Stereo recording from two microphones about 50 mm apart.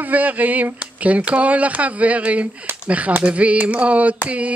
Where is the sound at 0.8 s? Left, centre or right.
Right.